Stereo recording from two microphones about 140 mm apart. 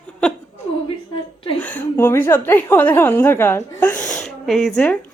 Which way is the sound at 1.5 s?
10° left (ahead or behind).